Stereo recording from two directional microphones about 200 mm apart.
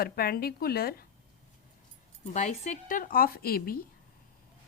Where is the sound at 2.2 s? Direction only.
35° left (ahead or behind).